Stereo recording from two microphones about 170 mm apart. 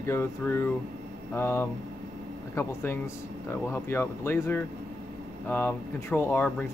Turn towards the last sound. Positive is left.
turn(degrees=10)  # may be behind; listen again after turning